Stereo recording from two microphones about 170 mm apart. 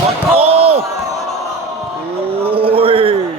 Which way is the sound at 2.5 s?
35° right (ahead or behind).